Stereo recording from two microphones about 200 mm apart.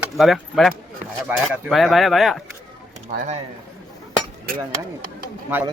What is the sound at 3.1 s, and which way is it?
Speech, 35° right (ahead or behind).